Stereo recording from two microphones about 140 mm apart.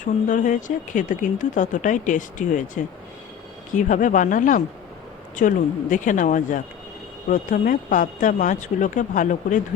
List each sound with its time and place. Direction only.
0.0 s speech: 65° left (ahead or behind)